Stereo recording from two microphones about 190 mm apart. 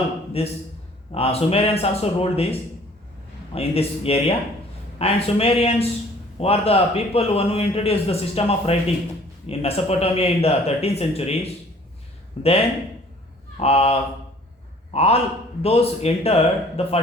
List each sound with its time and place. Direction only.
0.4 s a man's voice: 30° left (ahead or behind)